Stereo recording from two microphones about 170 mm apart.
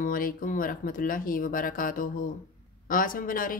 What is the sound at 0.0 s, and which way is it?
Speech, 55° left (ahead or behind).